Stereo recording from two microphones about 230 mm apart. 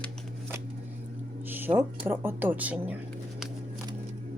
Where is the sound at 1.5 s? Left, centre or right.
Centre.